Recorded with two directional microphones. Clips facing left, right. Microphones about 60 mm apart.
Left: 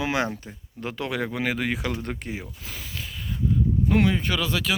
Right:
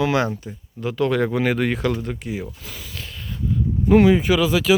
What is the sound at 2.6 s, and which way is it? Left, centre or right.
Speech, left.